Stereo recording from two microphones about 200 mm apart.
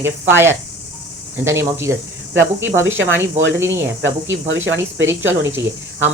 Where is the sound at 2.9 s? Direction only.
65° right (ahead or behind).